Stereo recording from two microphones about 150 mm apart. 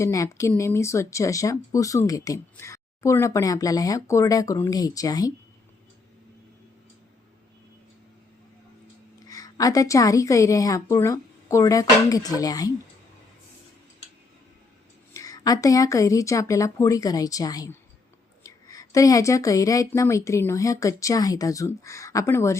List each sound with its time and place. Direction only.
0.0 s speech: 20° left (ahead or behind)
9.2 s speech: 25° left (ahead or behind)
15.1 s speech: 25° left (ahead or behind)